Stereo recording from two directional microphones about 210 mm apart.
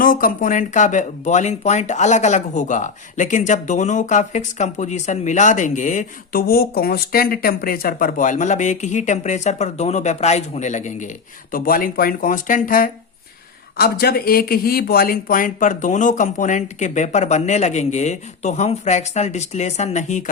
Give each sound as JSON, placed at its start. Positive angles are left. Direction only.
{"t": 0.0, "sound": "speech", "side_deg": 40}